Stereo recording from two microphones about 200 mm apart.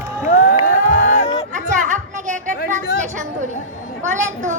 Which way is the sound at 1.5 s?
40° right (ahead or behind).